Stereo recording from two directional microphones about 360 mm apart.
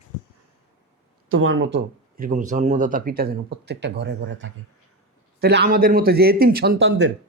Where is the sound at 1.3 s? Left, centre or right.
Right.